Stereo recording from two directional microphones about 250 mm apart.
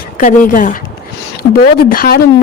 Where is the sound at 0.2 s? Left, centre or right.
Left.